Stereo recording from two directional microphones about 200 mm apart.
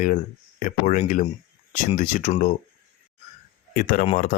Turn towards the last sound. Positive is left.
turn(degrees=45)  # may be behind; listen again after turning